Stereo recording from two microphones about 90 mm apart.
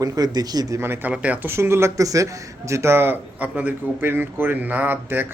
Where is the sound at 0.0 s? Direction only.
45° right (ahead or behind).